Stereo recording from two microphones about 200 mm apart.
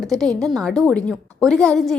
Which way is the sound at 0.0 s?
Centre (ahead or behind).